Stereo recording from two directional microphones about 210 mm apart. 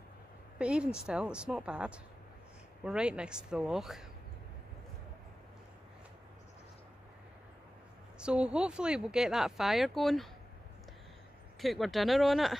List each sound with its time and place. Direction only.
0.6 s speech: 5° right (ahead or behind)
8.2 s speech: 5° right (ahead or behind)
11.6 s speech: centre (ahead or behind)